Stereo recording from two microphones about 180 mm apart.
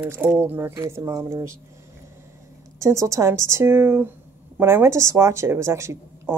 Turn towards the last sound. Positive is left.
turn(degrees=-15)  # may be behind; listen again after turning